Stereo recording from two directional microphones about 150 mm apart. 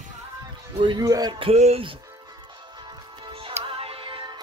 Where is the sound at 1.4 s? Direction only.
45° right (ahead or behind).